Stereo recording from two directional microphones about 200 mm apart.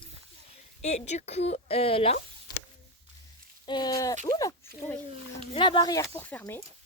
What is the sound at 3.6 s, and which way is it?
Speech, 20° left (ahead or behind).